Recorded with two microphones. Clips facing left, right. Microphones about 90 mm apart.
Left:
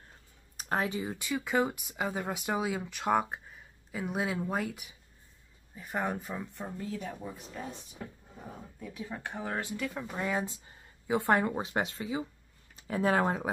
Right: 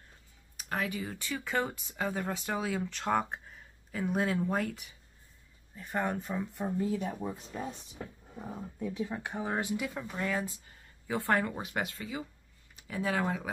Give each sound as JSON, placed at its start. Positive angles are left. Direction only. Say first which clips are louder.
{"t": 0.6, "sound": "speech", "louder": "left 3 dB", "side_deg": 30}
{"t": 6.6, "sound": "speech", "louder": "right 9 dB", "side_deg": -15}
{"t": 9.1, "sound": "speech", "louder": "right 2 dB", "side_deg": -15}
{"t": 10.0, "sound": "speech", "louder": "left 1 dB", "side_deg": 15}
{"t": 12.7, "sound": "speech", "louder": "left 5 dB", "side_deg": 35}